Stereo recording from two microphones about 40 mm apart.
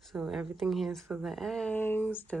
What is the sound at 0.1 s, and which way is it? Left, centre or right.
A woman's voice, centre.